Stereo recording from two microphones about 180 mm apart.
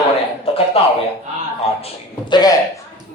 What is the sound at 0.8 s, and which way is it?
Speech, 30° left (ahead or behind).